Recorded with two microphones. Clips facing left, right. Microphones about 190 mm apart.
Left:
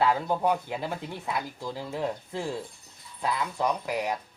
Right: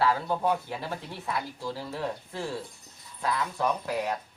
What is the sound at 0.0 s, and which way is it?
Speech, 15° left (ahead or behind).